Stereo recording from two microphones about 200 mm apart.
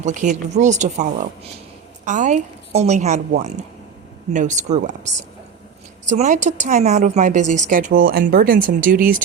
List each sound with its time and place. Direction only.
0.0 s speech: 40° right (ahead or behind)